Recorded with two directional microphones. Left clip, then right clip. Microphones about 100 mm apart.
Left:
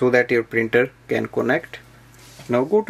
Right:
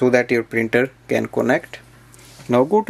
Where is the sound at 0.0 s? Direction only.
25° right (ahead or behind).